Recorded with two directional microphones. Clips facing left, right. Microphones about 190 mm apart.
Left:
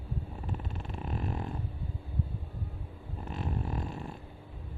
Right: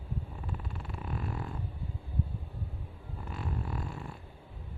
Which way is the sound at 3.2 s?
20° left (ahead or behind).